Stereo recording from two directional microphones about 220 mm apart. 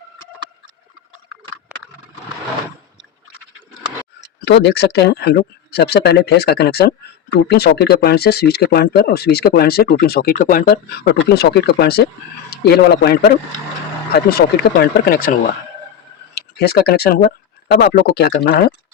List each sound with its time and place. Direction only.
1.7 s a sound: 5° right (ahead or behind)
4.4 s speech: 50° left (ahead or behind)
16.6 s speech: 45° left (ahead or behind)